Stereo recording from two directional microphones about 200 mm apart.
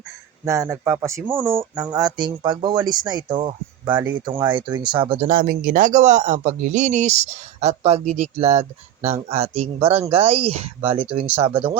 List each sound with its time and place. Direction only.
0.4 s speech: 15° right (ahead or behind)